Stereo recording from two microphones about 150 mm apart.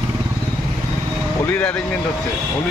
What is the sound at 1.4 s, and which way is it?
Speech, 10° left (ahead or behind).